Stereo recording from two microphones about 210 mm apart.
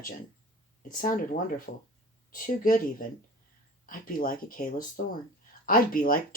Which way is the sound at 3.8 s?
40° left (ahead or behind).